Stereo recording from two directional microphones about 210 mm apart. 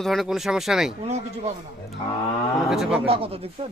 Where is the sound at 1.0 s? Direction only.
30° right (ahead or behind).